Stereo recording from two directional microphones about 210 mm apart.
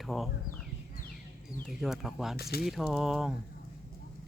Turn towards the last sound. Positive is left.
turn(degrees=-5)  # may be behind; listen again after turning